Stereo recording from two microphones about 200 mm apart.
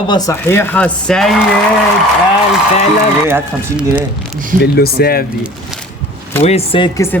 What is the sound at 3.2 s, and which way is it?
Speech, 10° right (ahead or behind).